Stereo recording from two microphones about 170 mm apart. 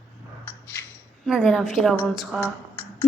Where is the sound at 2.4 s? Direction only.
15° left (ahead or behind).